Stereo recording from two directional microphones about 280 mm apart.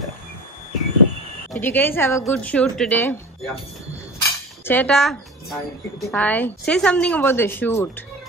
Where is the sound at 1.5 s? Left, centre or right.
Centre.